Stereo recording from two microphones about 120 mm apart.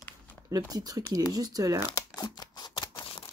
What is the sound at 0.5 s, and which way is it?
Speech, 30° right (ahead or behind).